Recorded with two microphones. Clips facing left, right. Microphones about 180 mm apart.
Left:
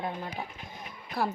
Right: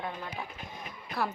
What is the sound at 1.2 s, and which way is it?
Speech, 30° left (ahead or behind).